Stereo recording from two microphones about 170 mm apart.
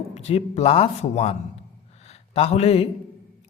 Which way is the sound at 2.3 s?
40° left (ahead or behind).